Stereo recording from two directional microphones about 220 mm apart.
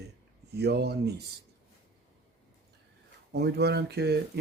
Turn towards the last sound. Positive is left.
turn(degrees=-50)  # may be behind; listen again after turning